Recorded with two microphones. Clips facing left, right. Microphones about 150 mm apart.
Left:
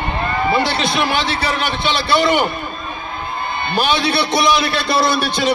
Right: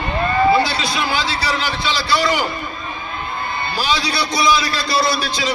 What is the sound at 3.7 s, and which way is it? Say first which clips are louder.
A man's voice: left 5 dB; 60° left (ahead or behind).